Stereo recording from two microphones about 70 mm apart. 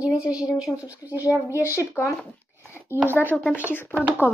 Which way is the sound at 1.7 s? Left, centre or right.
Left.